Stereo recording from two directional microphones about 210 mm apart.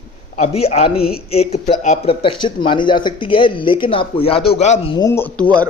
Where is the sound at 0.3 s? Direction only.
30° left (ahead or behind).